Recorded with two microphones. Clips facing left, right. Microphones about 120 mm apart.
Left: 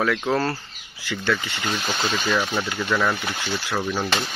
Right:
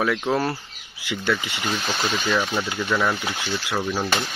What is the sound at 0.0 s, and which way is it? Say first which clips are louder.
Speech: even; 10° right (ahead or behind).